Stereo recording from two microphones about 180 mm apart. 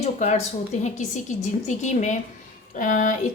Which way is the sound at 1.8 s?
40° left (ahead or behind).